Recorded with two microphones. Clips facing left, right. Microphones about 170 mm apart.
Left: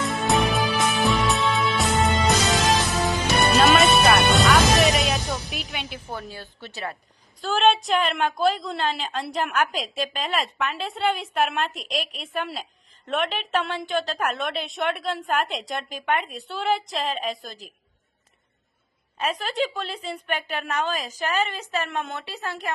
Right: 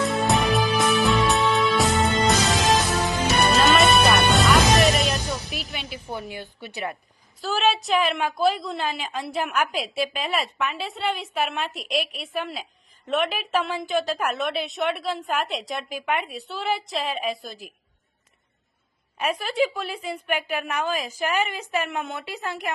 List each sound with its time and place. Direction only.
0.1 s music: centre (ahead or behind)
6.1 s a woman's voice: 15° right (ahead or behind)
7.4 s a woman's voice: 5° right (ahead or behind)
19.2 s a woman's voice: 10° right (ahead or behind)